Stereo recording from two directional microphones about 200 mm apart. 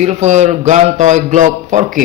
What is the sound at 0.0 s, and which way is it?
A man's voice, 35° right (ahead or behind).